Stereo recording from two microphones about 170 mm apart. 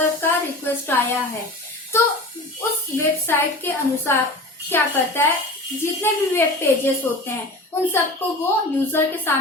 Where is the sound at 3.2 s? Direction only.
15° left (ahead or behind).